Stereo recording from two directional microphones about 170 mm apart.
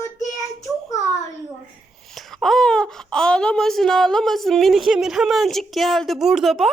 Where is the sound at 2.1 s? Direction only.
Centre (ahead or behind).